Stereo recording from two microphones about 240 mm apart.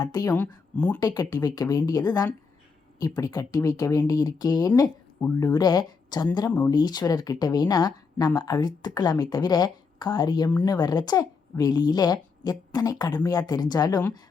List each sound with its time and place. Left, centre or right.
0.0 s speech: centre
0.4 s speech: centre
0.9 s speech: centre